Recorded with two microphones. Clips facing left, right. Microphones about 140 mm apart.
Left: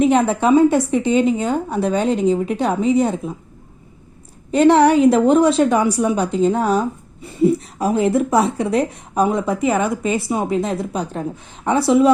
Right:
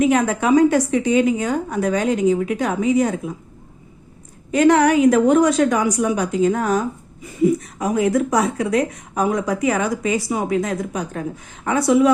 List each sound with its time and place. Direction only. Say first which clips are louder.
0.0 s a woman's voice: left 2 dB; 30° left (ahead or behind)
4.5 s a woman's voice: left 2 dB; 30° left (ahead or behind)